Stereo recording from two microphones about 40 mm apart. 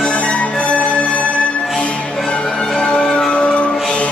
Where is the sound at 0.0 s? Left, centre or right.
Left.